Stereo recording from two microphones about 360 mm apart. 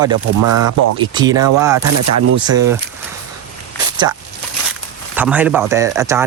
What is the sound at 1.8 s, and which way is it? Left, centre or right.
Speech, right.